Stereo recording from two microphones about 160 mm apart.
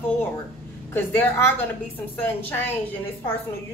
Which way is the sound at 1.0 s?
10° left (ahead or behind).